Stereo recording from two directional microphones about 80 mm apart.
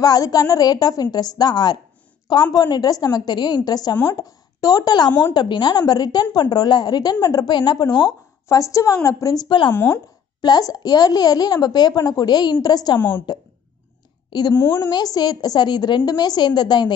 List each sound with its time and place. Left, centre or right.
0.0 s a woman's voice: left
7.5 s a child's voice: left
8.5 s a woman's voice: left
9.7 s a woman's voice: left
10.4 s a child's voice: left
14.5 s a woman's voice: left
14.8 s a child's voice: left